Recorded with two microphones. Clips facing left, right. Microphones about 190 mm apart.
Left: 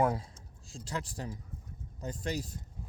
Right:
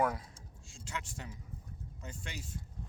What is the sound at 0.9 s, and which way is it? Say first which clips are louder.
Speech: left 5 dB; 35° left (ahead or behind).